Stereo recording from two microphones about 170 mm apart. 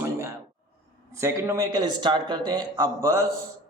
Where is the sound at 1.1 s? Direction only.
15° right (ahead or behind).